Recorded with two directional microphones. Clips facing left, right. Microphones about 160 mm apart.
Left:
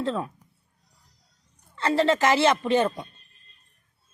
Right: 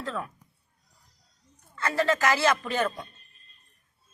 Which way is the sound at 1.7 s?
25° left (ahead or behind).